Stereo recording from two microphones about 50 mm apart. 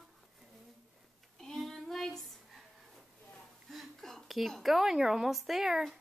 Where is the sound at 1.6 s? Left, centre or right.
Centre.